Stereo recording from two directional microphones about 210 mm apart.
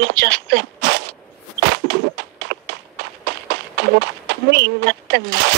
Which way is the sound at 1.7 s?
50° right (ahead or behind).